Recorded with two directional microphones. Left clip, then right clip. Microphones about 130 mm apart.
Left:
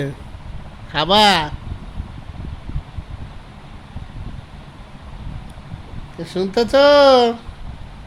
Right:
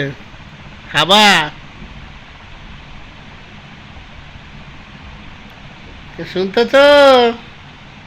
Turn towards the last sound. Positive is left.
turn(degrees=10)  # may be behind; listen again after turning